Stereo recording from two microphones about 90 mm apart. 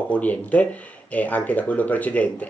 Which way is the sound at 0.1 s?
15° left (ahead or behind).